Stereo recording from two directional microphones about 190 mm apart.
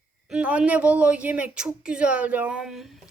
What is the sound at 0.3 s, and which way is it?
Speech, 5° right (ahead or behind).